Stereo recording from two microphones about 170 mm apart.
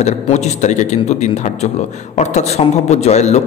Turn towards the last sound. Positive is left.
turn(degrees=40)  # may be behind; listen again after turning